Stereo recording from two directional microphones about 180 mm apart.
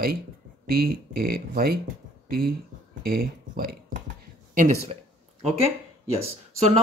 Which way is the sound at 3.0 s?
55° right (ahead or behind).